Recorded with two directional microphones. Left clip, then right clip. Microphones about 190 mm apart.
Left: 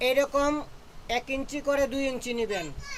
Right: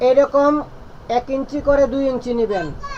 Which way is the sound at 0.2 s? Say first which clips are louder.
Right 11 dB; 20° left (ahead or behind).